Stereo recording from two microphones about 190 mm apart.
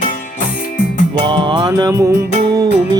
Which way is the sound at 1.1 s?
25° right (ahead or behind).